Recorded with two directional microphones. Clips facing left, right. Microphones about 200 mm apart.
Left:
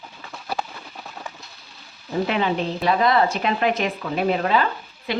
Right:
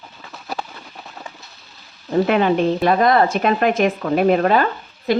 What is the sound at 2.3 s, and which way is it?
A woman's voice, 55° right (ahead or behind).